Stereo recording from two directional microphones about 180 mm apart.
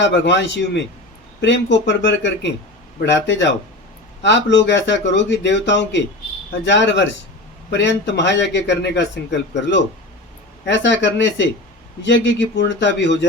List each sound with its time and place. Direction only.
0.0 s a man's voice: 80° left